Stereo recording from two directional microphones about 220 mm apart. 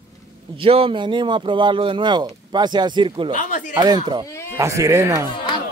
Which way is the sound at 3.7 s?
20° right (ahead or behind).